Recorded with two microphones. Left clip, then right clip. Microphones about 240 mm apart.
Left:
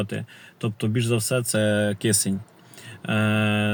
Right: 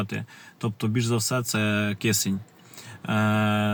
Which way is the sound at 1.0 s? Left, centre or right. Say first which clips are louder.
Left 3 dB; centre.